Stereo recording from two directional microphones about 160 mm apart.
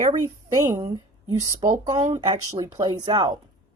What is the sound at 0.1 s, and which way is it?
A woman's voice, 20° right (ahead or behind).